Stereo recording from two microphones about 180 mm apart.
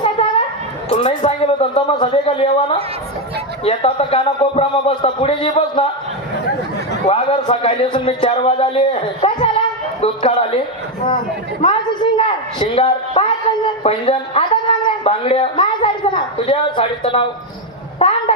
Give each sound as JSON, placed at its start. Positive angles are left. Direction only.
{"t": 0.0, "sound": "a sound", "side_deg": 25}
{"t": 0.9, "sound": "a man's voice", "side_deg": 35}
{"t": 7.1, "sound": "a man's voice", "side_deg": 30}
{"t": 11.6, "sound": "a man's voice", "side_deg": 30}